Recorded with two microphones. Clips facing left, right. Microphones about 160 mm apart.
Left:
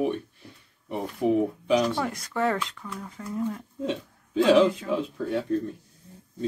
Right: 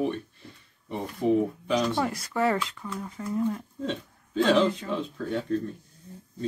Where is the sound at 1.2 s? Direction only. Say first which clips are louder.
Even; 10° left (ahead or behind).